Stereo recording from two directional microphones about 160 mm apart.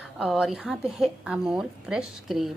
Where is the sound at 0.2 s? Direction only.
5° right (ahead or behind).